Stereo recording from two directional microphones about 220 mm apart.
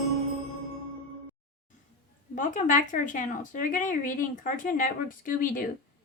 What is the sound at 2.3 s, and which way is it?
Speech, 35° left (ahead or behind).